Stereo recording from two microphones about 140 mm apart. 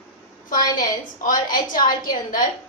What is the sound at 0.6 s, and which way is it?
Speech, 30° left (ahead or behind).